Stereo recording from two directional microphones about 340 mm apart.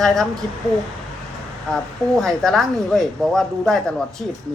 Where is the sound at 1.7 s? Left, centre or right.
Centre.